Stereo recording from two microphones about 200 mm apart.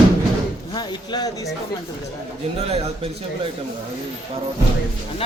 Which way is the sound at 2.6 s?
30° right (ahead or behind).